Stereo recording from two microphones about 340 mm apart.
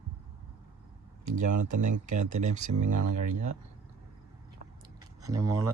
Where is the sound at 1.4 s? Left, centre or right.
Right.